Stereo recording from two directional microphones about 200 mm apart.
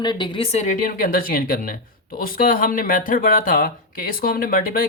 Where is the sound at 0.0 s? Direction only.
20° left (ahead or behind).